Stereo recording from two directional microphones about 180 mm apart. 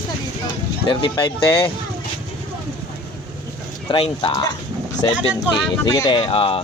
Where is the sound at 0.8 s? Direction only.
30° left (ahead or behind).